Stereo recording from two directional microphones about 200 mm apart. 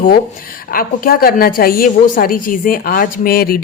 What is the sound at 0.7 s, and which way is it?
A woman's voice, 45° left (ahead or behind).